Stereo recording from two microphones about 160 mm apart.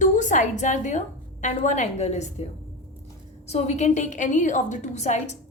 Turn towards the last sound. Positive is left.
turn(degrees=45)  # may be behind; listen again after turning